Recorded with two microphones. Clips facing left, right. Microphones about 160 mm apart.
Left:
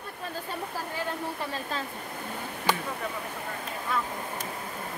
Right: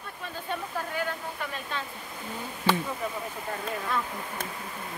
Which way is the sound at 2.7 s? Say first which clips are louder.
Right 2 dB; 15° left (ahead or behind).